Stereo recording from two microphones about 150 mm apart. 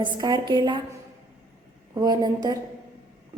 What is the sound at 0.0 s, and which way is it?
Speech, 25° right (ahead or behind).